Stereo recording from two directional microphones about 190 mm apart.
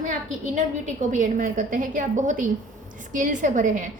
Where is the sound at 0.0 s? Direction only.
45° right (ahead or behind).